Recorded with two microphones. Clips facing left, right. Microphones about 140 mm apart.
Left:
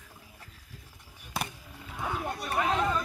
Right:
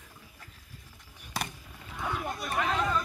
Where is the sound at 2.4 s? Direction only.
10° left (ahead or behind).